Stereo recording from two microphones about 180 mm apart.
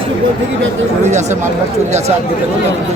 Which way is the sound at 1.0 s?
40° right (ahead or behind).